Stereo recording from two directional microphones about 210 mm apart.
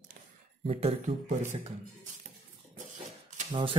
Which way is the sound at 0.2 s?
40° right (ahead or behind).